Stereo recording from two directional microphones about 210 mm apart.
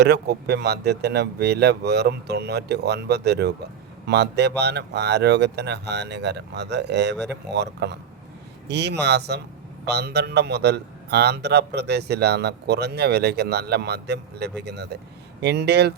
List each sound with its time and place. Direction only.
0.0 s a man's voice: 50° right (ahead or behind)